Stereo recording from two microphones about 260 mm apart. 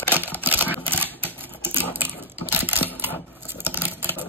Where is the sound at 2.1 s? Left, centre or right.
Centre.